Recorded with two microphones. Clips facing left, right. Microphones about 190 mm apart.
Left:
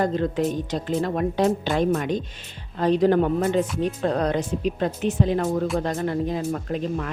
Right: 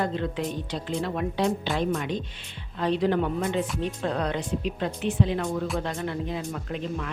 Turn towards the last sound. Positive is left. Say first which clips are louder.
# left 5 dB
turn(degrees=40)  # may be behind; listen again after turning